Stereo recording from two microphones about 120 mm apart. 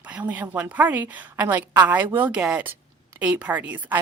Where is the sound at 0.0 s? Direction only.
15° right (ahead or behind).